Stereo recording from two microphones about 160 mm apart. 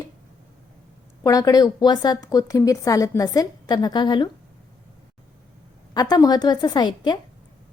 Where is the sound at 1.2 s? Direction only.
25° left (ahead or behind).